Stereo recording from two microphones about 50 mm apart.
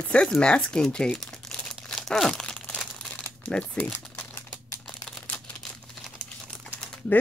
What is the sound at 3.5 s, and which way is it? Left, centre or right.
Speech, left.